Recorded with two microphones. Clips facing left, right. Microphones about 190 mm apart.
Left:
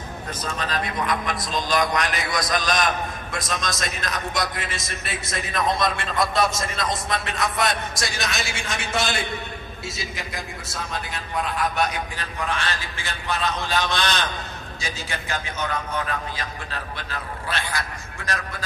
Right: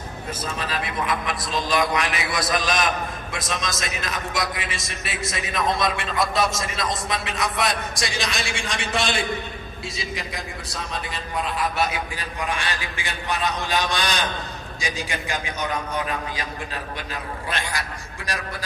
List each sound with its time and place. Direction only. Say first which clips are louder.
0.4 s a man's voice: left 2 dB; 5° right (ahead or behind)